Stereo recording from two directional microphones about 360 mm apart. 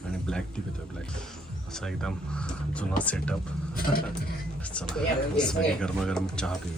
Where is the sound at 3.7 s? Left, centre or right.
Left.